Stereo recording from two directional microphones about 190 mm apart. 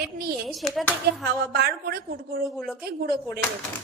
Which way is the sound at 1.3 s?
55° right (ahead or behind).